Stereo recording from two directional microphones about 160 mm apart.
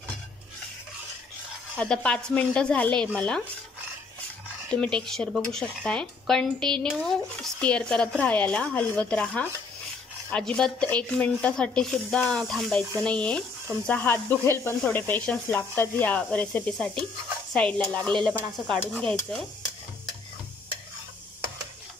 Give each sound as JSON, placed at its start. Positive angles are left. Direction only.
{"t": 1.8, "sound": "speech", "side_deg": 5}
{"t": 4.6, "sound": "speech", "side_deg": 5}